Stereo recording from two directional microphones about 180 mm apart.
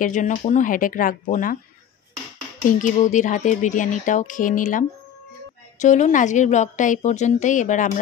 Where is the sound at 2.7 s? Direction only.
45° left (ahead or behind).